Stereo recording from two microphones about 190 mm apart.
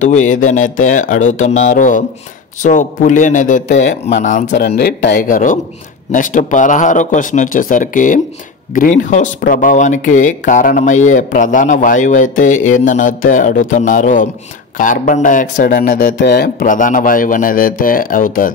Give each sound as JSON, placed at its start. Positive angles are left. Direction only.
{"t": 0.0, "sound": "speech", "side_deg": 40}
{"t": 4.5, "sound": "speech", "side_deg": 60}
{"t": 16.2, "sound": "speech", "side_deg": 60}